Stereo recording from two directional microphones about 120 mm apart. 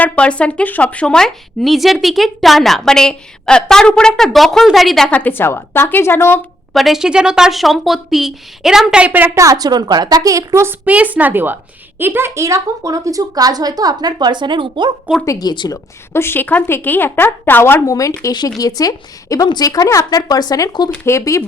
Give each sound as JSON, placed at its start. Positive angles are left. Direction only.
{"t": 0.0, "sound": "a woman's voice", "side_deg": 10}
{"t": 6.7, "sound": "speech", "side_deg": 0}
{"t": 9.4, "sound": "a woman's voice", "side_deg": -30}
{"t": 15.2, "sound": "speech", "side_deg": 30}
{"t": 16.1, "sound": "a woman's voice", "side_deg": 20}